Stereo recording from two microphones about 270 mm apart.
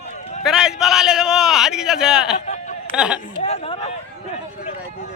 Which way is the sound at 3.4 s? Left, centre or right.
Left.